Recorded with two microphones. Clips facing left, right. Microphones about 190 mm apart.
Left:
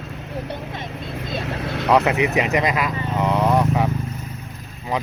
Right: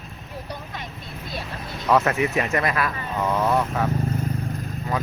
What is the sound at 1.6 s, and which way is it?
Vehicle, 75° left (ahead or behind).